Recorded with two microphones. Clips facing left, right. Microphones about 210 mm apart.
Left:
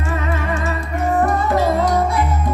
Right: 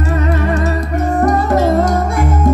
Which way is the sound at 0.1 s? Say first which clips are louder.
Right 5 dB; 40° right (ahead or behind).